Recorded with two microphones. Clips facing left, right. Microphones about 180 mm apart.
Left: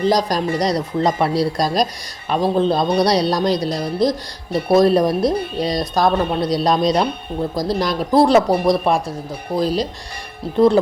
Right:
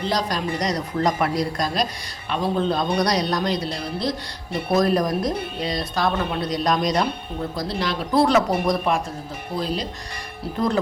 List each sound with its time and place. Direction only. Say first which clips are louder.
0.1 s speech: left 6 dB; 40° left (ahead or behind)
7.5 s speech: left 6 dB; 40° left (ahead or behind)